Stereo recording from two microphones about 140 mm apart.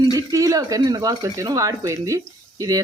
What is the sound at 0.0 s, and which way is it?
A woman's voice, 25° right (ahead or behind).